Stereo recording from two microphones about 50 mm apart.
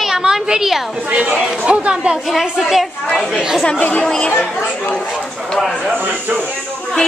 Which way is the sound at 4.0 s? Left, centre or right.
Centre.